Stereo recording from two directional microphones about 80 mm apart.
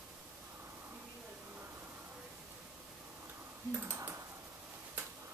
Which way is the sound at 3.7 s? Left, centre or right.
Right.